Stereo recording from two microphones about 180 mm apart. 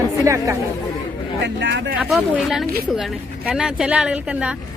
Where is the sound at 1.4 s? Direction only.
75° right (ahead or behind).